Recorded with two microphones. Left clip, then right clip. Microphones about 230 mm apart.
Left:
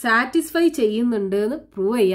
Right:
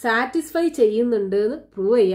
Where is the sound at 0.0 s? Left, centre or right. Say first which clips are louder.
Left 2 dB; left.